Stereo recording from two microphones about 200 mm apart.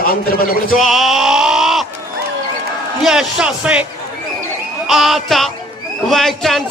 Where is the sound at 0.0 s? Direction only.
45° left (ahead or behind).